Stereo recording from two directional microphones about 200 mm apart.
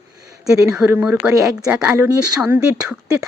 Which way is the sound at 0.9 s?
5° right (ahead or behind).